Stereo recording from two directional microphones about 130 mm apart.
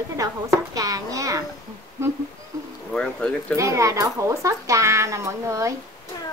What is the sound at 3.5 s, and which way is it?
Speech, 25° right (ahead or behind).